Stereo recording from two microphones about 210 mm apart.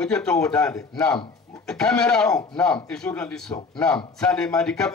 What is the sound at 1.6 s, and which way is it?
Speech, 5° left (ahead or behind).